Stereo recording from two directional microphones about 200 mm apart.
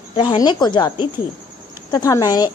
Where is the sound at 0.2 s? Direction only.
20° left (ahead or behind).